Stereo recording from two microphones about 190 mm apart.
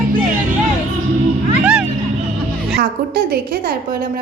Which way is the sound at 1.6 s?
5° right (ahead or behind).